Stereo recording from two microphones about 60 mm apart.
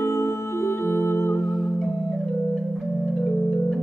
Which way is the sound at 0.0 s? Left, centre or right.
Left.